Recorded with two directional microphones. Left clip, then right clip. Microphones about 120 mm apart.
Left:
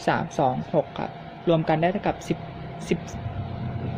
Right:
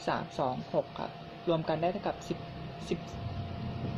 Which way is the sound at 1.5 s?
55° left (ahead or behind).